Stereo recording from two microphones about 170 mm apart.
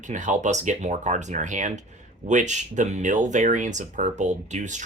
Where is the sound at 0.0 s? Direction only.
45° right (ahead or behind).